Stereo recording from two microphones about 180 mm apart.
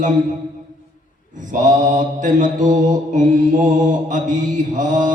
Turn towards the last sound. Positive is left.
turn(degrees=-45)  # may be behind; listen again after turning